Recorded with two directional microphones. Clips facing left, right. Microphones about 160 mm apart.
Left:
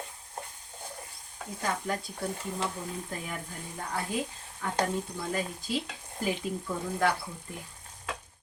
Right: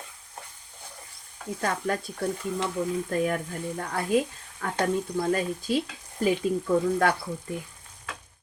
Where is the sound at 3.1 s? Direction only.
60° right (ahead or behind).